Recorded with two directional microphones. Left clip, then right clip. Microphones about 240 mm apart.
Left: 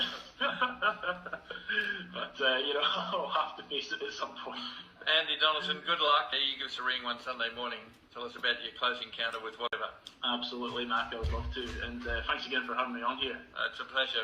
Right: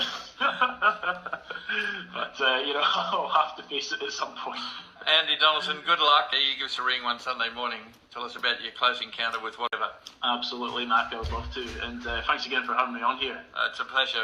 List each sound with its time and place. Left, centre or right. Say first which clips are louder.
0.0 s music: right 6 dB; right
1.7 s a man's voice: right 3 dB; right